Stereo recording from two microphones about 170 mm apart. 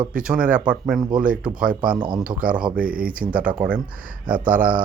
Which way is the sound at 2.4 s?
55° right (ahead or behind).